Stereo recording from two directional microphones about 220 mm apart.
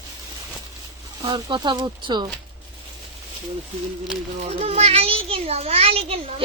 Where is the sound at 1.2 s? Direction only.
20° right (ahead or behind).